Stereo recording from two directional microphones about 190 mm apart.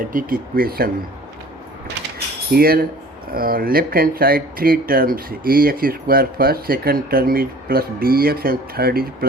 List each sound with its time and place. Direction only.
0.1 s speech: 45° right (ahead or behind)
2.5 s speech: 50° right (ahead or behind)